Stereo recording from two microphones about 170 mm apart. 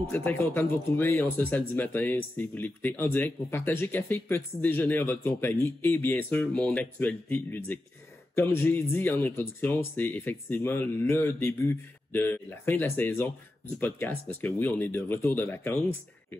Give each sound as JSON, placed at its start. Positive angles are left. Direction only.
{"t": 0.1, "sound": "speech", "side_deg": 10}